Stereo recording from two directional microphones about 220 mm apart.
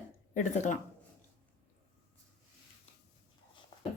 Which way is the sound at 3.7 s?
20° left (ahead or behind).